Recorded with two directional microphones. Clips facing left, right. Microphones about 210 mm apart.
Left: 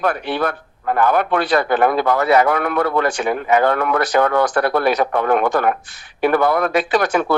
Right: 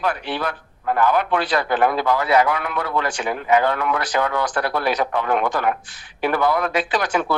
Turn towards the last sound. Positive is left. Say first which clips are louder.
# left 5 dB
turn(degrees=55)  # may be behind; listen again after turning